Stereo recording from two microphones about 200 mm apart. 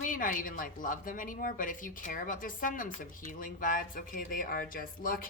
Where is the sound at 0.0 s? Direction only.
40° left (ahead or behind).